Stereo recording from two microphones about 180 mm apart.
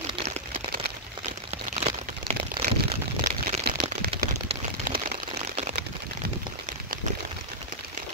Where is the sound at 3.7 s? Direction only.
60° right (ahead or behind).